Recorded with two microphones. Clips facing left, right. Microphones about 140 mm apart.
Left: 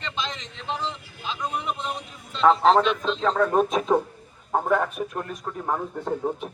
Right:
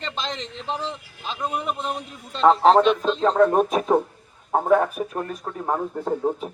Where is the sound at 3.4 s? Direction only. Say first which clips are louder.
Right 3 dB; 15° right (ahead or behind).